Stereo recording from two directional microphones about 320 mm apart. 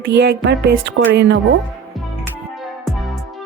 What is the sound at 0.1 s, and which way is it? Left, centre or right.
Music, right.